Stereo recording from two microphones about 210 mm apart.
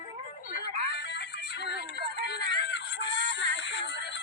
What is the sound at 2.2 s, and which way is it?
Synthetic singing, 55° left (ahead or behind).